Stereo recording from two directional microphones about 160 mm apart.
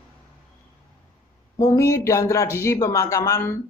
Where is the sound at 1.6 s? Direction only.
20° left (ahead or behind).